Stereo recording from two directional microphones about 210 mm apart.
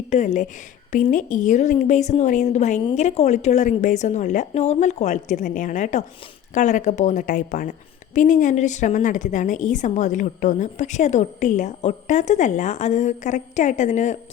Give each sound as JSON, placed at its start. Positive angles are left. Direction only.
{"t": 0.1, "sound": "a woman's voice", "side_deg": 35}